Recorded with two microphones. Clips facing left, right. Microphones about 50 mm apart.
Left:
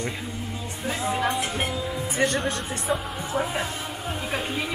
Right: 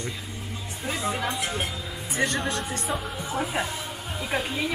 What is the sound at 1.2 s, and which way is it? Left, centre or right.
Speech, left.